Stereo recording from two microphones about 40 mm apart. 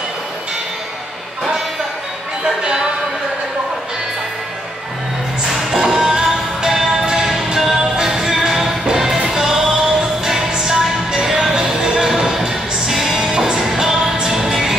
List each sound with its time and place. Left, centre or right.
2.4 s speech: centre
5.9 s music: centre
9.8 s music: centre
10.2 s music: centre